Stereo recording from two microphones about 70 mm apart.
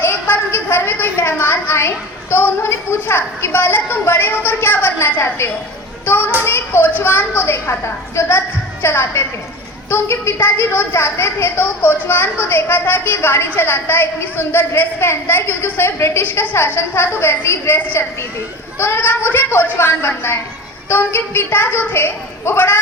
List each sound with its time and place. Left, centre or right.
0.0 s a sound: left
2.3 s a woman's voice: left
7.4 s a woman's voice: left
16.2 s a woman's voice: left